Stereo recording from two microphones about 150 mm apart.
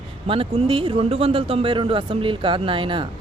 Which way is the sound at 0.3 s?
35° right (ahead or behind).